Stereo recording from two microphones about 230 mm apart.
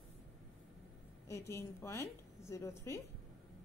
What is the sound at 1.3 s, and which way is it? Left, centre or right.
A woman's voice, centre.